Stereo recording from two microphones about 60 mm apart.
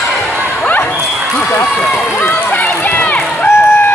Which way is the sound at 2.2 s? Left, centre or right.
Left.